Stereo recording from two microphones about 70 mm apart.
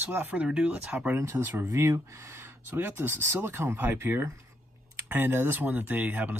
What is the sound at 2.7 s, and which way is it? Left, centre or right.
Speech, right.